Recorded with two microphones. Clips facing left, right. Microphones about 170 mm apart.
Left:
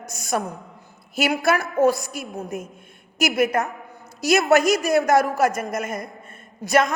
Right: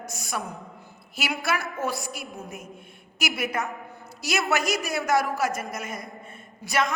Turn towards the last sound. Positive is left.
turn(degrees=45)  # may be behind; listen again after turning